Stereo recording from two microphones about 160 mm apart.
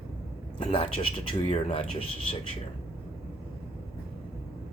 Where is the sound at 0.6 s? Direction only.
35° left (ahead or behind).